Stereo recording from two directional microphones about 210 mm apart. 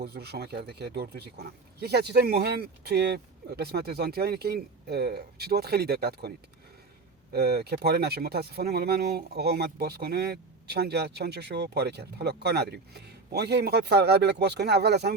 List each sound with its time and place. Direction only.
0.0 s speech: 50° right (ahead or behind)
7.3 s speech: 50° right (ahead or behind)